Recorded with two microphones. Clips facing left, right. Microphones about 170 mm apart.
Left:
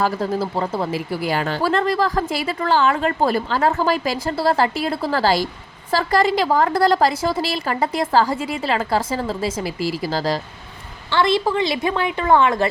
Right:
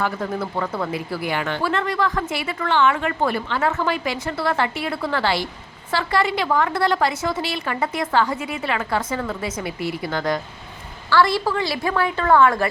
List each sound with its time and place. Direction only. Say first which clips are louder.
0.0 s a woman's voice: left 4 dB; 30° left (ahead or behind)
9.7 s speech: left 3 dB; 90° left
10.1 s a woman's voice: right 1 dB; 30° left (ahead or behind)
11.1 s a woman's voice: left 1 dB; 20° left (ahead or behind)